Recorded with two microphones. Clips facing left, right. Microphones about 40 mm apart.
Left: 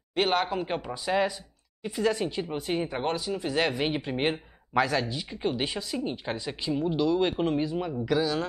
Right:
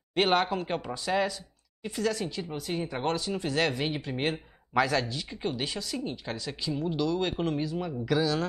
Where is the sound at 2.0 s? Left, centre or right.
Left.